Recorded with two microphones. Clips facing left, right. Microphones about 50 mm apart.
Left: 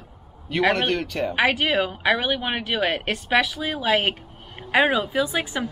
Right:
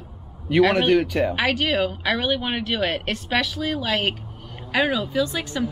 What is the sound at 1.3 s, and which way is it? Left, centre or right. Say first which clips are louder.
A woman's voice: left 1 dB; centre.